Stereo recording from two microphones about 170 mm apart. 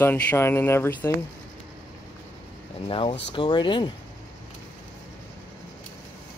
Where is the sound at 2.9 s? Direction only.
30° left (ahead or behind).